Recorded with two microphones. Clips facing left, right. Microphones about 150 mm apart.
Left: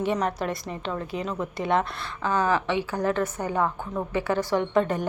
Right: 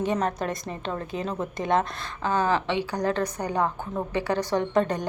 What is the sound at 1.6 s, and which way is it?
Speech, 45° right (ahead or behind).